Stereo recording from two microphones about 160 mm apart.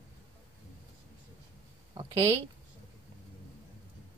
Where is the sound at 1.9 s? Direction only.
30° right (ahead or behind).